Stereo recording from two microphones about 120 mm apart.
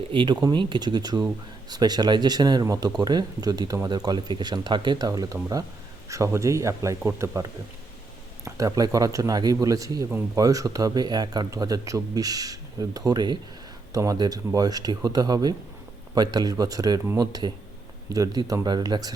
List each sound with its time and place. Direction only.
0.1 s speech: 45° right (ahead or behind); by 7.4 s 25° right (ahead or behind)
8.4 s speech: 30° right (ahead or behind)